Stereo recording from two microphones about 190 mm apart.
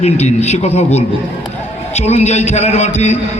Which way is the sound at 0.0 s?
35° left (ahead or behind).